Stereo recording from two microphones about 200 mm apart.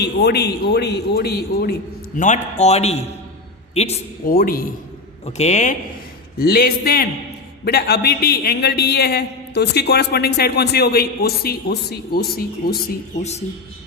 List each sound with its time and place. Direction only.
0.0 s a man's voice: 55° left (ahead or behind)
2.1 s a man's voice: 40° left (ahead or behind)
4.3 s a man's voice: 45° left (ahead or behind)
5.2 s a man's voice: 35° left (ahead or behind)
6.4 s a man's voice: 50° left (ahead or behind)